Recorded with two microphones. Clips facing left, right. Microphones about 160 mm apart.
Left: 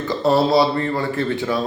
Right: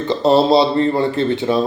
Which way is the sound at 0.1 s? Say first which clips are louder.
Right 4 dB; 25° right (ahead or behind).